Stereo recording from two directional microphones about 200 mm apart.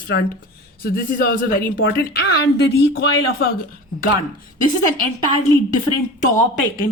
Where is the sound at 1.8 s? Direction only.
65° left (ahead or behind).